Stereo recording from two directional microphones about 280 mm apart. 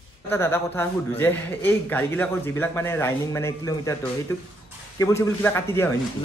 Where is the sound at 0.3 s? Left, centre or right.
Centre.